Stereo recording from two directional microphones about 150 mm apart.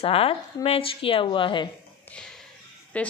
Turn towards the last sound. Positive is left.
turn(degrees=10)  # may be behind; listen again after turning